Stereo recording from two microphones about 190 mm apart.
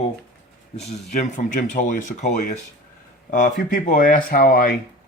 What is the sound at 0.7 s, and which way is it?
Speech, 35° left (ahead or behind).